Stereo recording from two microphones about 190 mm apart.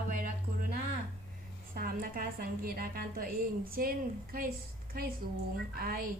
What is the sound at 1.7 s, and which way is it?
A woman's voice, 50° right (ahead or behind).